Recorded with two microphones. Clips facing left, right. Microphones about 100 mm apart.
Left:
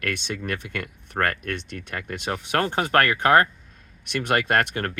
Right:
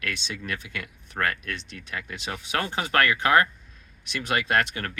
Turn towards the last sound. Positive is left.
turn(degrees=50)  # may be behind; listen again after turning